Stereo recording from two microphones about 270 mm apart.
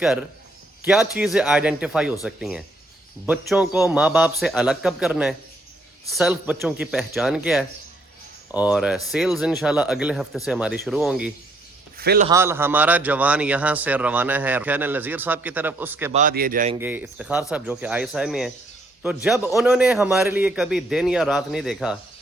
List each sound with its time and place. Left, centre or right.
0.0 s a man's voice: centre
11.9 s a man's voice: right
12.3 s a man's voice: centre
16.1 s speech: right
16.7 s a man's voice: centre